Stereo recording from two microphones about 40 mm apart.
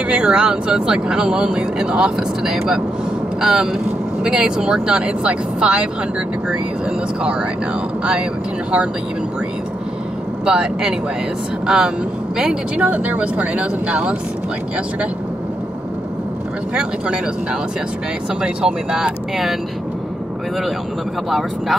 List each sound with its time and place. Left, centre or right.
0.0 s speech: right
10.4 s speech: right
12.7 s speech: right
16.7 s speech: right
21.3 s speech: centre